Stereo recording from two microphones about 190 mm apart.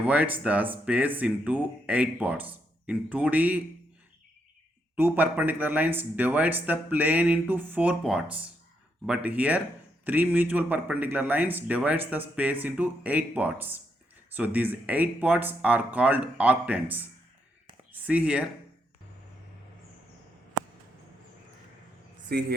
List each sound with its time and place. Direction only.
0.0 s speech: 10° right (ahead or behind)
4.9 s speech: 10° right (ahead or behind)
22.3 s a man's voice: 55° right (ahead or behind)